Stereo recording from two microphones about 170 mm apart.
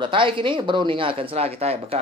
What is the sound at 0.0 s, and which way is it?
Speech, 30° right (ahead or behind).